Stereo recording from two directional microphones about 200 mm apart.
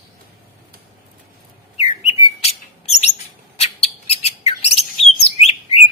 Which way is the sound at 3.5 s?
30° left (ahead or behind).